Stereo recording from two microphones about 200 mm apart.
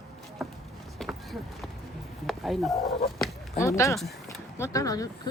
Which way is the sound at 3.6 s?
15° left (ahead or behind).